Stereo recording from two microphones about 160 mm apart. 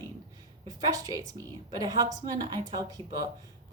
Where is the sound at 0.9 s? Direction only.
20° right (ahead or behind).